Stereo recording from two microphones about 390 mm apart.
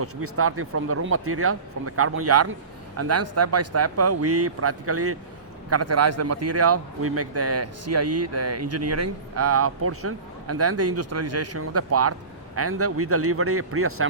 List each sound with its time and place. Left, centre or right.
0.0 s a man's voice: right